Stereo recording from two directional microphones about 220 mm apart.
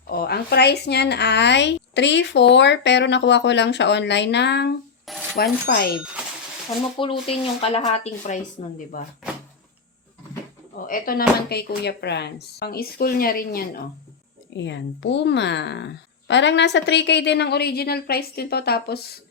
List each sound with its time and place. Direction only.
0.1 s a woman's voice: 45° left (ahead or behind)
5.0 s rub: centre (ahead or behind)
5.4 s a woman's voice: 45° left (ahead or behind)
7.0 s speech: 25° left (ahead or behind)
8.9 s speech: 40° left (ahead or behind)
10.8 s a woman's voice: 40° left (ahead or behind)
14.5 s a woman's voice: 55° left (ahead or behind)